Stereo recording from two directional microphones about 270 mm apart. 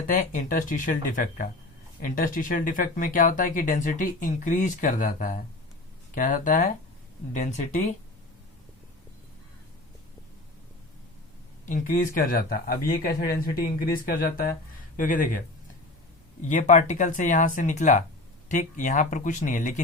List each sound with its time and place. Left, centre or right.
0.1 s speech: left
11.6 s speech: left